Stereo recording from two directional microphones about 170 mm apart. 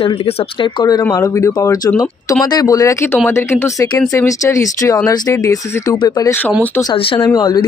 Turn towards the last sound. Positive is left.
turn(degrees=25)  # may be behind; listen again after turning